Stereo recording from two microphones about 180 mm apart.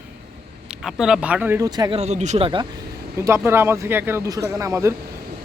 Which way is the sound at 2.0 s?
40° right (ahead or behind).